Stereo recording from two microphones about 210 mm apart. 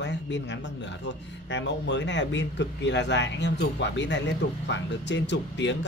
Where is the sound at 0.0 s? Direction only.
55° left (ahead or behind).